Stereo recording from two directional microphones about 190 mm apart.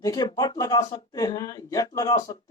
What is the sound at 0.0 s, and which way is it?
Speech, 20° left (ahead or behind).